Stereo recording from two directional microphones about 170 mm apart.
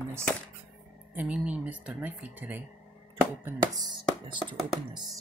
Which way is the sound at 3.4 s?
20° right (ahead or behind).